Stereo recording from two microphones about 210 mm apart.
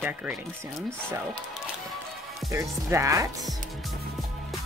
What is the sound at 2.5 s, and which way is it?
Speech, 15° right (ahead or behind).